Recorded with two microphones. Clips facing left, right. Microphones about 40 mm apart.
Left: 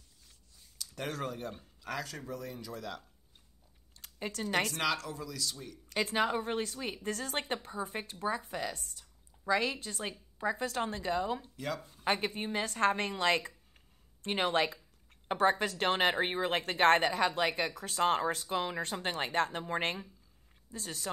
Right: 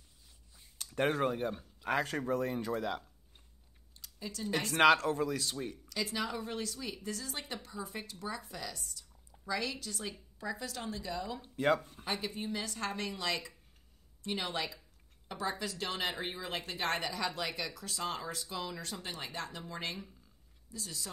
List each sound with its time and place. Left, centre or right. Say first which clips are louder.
0.7 s a sound: right 8 dB; right
1.1 s speech: right 6 dB; right
4.0 s speech: left 3 dB; left
4.7 s speech: right 8 dB; right
5.9 s speech: left 8 dB; left
11.4 s speech: right 8 dB; right
12.0 s a woman's voice: left 5 dB; left